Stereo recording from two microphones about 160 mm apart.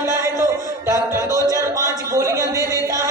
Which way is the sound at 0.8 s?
15° right (ahead or behind).